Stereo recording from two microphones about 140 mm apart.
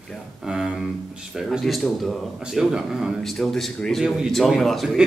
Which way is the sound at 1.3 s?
Centre (ahead or behind).